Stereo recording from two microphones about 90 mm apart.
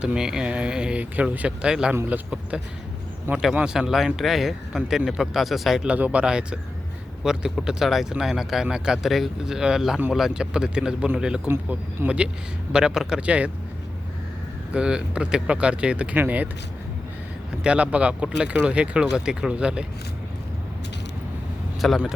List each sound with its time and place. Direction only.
0.0 s speech: 10° right (ahead or behind)
5.9 s speech: 15° right (ahead or behind)
11.5 s speech: 25° right (ahead or behind)
12.0 s speech: 15° right (ahead or behind)
14.7 s speech: 10° right (ahead or behind)
17.6 s speech: 15° right (ahead or behind)
21.8 s speech: centre (ahead or behind)